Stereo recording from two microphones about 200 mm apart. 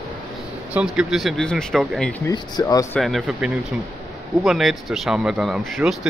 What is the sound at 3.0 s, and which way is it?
Speech, centre (ahead or behind).